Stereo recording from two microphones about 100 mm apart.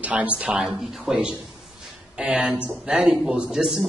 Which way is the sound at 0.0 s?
15° right (ahead or behind).